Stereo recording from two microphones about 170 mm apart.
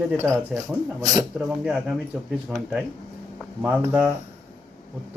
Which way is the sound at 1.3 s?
Centre (ahead or behind).